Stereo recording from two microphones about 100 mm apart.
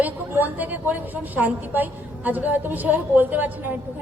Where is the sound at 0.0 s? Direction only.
15° right (ahead or behind).